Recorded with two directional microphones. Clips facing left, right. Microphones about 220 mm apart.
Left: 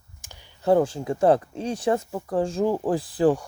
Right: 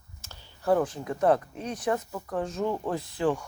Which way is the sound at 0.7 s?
30° left (ahead or behind).